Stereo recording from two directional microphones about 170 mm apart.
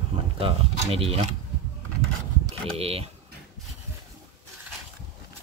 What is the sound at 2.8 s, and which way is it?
Speech, 35° right (ahead or behind).